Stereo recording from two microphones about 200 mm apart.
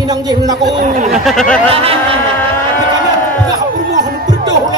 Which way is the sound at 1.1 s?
Centre (ahead or behind).